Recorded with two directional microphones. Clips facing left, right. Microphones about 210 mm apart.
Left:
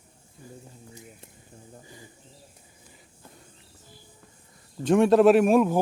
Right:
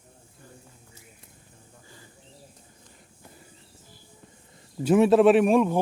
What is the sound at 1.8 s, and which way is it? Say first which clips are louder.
Bird: left 4 dB; 15° left (ahead or behind).